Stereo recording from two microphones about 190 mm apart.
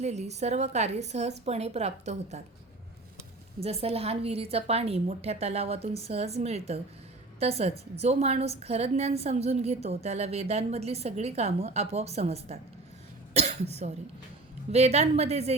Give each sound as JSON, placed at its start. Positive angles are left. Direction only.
{"t": 0.0, "sound": "a woman's voice", "side_deg": -35}
{"t": 3.6, "sound": "a woman's voice", "side_deg": -30}